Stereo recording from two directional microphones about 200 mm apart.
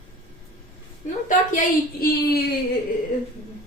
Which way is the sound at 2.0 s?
50° left (ahead or behind).